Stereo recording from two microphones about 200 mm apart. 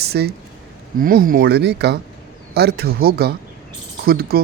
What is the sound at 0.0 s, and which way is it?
Speech, 50° right (ahead or behind).